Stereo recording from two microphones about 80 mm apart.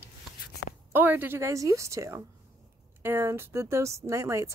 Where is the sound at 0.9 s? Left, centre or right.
Right.